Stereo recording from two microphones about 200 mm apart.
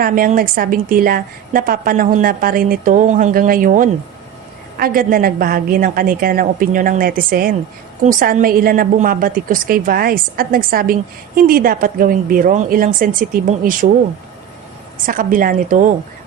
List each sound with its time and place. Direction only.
0.0 s a woman's voice: 40° right (ahead or behind)
15.0 s a woman's voice: 45° right (ahead or behind)